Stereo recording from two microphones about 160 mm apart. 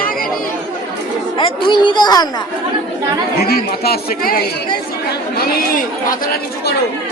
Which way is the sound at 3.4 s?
70° left (ahead or behind).